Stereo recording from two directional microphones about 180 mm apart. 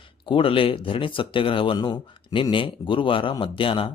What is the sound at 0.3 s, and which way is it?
Speech, 30° left (ahead or behind).